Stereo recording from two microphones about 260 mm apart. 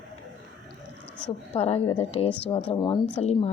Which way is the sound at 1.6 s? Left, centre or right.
Left.